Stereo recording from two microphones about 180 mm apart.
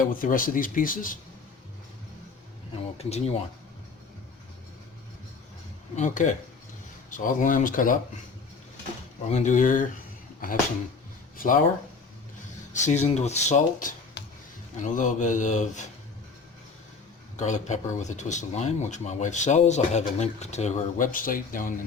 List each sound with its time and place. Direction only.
0.0 s speech: 50° left (ahead or behind)
3.0 s speech: 35° left (ahead or behind)
6.0 s speech: 45° left (ahead or behind)
9.3 s speech: 45° left (ahead or behind)
12.8 s speech: 40° left (ahead or behind)
17.3 s speech: 40° left (ahead or behind)